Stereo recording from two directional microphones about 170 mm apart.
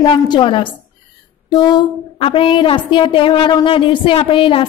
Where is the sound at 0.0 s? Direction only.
25° left (ahead or behind).